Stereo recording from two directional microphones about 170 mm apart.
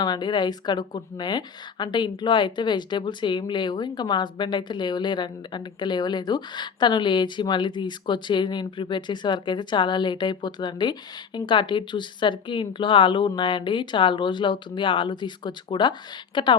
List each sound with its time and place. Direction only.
0.0 s speech: 25° left (ahead or behind)